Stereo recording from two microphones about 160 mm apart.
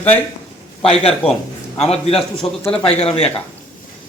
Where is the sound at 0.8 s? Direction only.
35° left (ahead or behind).